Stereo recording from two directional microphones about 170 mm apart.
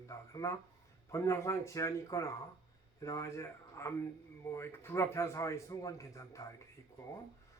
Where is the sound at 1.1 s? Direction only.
15° left (ahead or behind).